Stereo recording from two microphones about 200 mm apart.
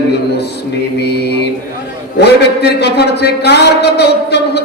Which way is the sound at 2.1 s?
55° left (ahead or behind).